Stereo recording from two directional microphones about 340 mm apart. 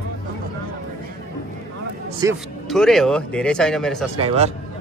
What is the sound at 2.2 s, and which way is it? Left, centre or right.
Speech, centre.